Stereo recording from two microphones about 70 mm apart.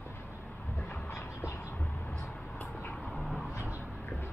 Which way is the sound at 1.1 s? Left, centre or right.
Left.